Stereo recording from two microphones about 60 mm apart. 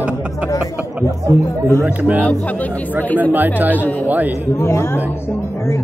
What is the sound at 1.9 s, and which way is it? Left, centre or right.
Speech, right.